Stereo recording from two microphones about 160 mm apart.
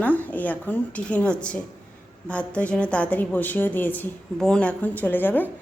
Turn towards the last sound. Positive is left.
turn(degrees=10)  # may be behind; listen again after turning